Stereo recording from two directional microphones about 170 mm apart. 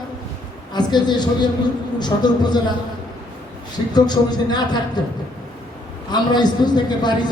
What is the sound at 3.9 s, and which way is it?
Speech, 25° left (ahead or behind).